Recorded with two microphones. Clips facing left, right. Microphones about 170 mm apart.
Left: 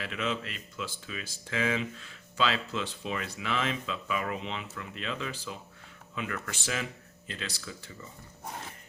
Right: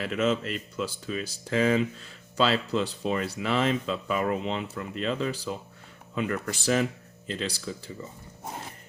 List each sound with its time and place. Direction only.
0.0 s speech: 40° right (ahead or behind)